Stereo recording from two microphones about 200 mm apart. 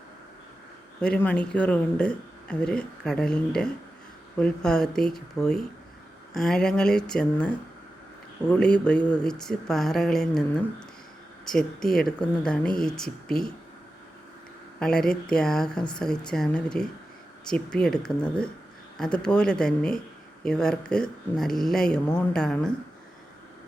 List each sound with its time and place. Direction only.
1.0 s speech: 5° left (ahead or behind)
14.8 s speech: 5° left (ahead or behind)